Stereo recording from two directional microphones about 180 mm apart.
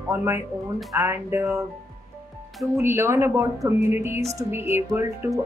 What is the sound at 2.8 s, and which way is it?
Speech, 15° right (ahead or behind).